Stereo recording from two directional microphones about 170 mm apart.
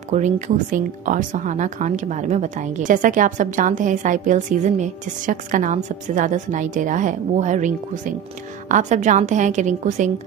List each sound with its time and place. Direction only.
0.1 s speech: 45° right (ahead or behind)